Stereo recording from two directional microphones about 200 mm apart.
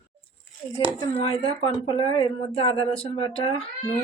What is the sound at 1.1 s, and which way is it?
Speech, 30° left (ahead or behind).